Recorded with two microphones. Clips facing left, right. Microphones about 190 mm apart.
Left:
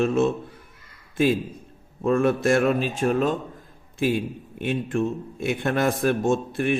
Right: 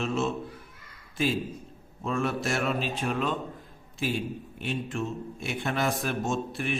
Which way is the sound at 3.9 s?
55° left (ahead or behind).